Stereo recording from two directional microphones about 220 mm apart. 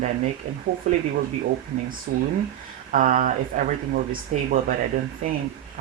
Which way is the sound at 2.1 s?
40° right (ahead or behind).